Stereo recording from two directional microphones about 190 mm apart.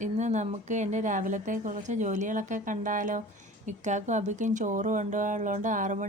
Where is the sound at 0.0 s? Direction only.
40° right (ahead or behind).